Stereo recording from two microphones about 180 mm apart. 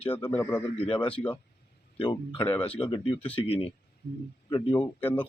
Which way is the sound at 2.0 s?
25° left (ahead or behind).